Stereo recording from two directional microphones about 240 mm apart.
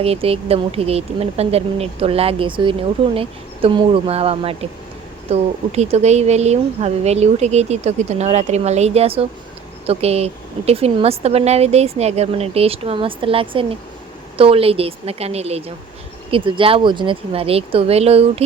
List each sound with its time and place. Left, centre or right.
0.0 s speech: right